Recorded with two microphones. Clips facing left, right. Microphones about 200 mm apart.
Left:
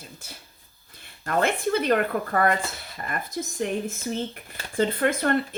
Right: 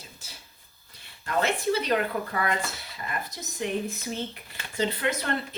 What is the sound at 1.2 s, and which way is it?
A woman's voice, 50° left (ahead or behind).